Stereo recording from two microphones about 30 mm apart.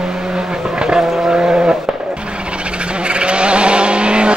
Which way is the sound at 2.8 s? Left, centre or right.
Right.